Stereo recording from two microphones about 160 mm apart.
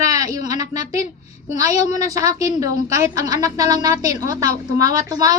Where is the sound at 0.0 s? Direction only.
20° right (ahead or behind).